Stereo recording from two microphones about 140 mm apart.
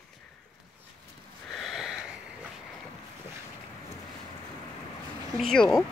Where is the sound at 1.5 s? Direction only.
Centre (ahead or behind).